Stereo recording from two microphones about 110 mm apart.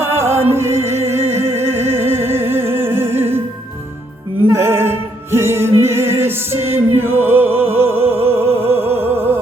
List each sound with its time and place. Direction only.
0.0 s music: 20° right (ahead or behind)
4.4 s music: 25° right (ahead or behind)